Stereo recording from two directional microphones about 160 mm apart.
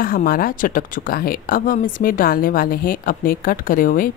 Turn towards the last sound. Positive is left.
turn(degrees=60)  # may be behind; listen again after turning